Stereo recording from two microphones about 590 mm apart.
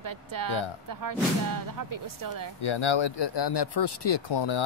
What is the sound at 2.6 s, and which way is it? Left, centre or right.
Speech, left.